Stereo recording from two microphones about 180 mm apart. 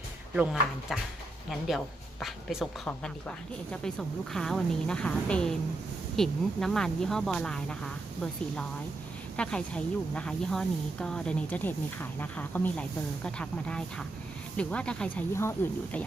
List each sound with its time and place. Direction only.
0.3 s a woman's voice: centre (ahead or behind)
9.3 s a woman's voice: 5° left (ahead or behind)